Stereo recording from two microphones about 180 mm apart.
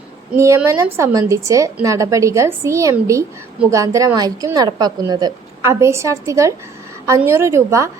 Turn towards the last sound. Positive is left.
turn(degrees=-15)  # may be behind; listen again after turning